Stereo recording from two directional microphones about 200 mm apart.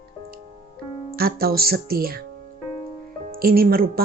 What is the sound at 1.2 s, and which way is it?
Speech, 50° right (ahead or behind).